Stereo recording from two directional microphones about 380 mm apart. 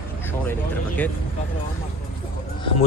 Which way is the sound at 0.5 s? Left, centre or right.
Centre.